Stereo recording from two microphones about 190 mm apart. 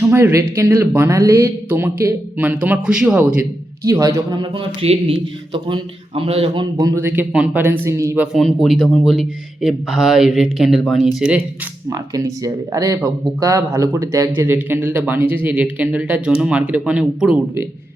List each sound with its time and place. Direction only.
0.0 s a man's voice: 10° right (ahead or behind)
3.8 s a man's voice: 15° right (ahead or behind)
11.9 s a man's voice: 20° right (ahead or behind)